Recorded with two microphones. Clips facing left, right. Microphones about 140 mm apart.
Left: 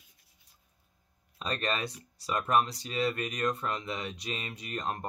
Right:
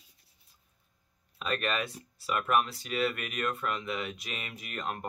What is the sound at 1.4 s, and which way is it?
Speech, 35° left (ahead or behind).